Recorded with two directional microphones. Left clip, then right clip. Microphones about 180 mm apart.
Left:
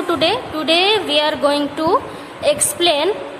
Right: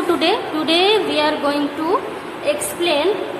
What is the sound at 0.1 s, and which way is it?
A woman's voice, 40° left (ahead or behind).